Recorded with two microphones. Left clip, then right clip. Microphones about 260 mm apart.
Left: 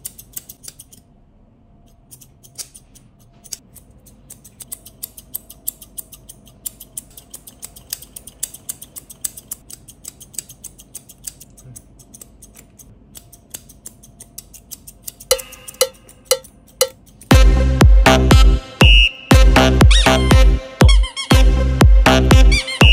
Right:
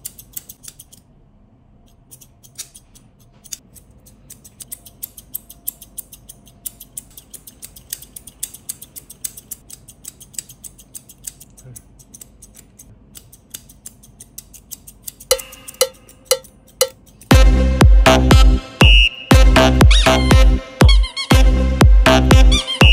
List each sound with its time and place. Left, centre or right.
0.0 s scissors: centre
4.3 s scissors: centre
21.3 s music: centre